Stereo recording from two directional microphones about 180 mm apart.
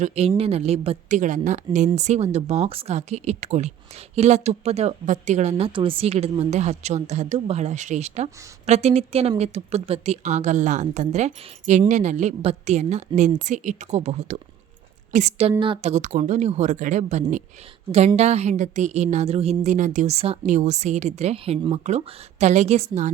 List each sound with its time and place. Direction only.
0.0 s speech: 35° right (ahead or behind)